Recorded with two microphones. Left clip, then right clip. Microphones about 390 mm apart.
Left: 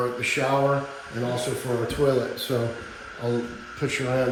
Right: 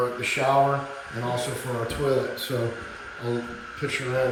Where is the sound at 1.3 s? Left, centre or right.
Centre.